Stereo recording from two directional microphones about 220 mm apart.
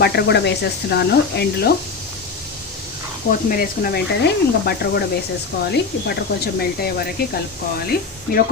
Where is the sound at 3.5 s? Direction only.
40° left (ahead or behind).